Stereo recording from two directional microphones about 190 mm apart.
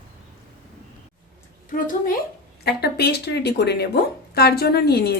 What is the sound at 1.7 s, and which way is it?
Speech, 45° left (ahead or behind).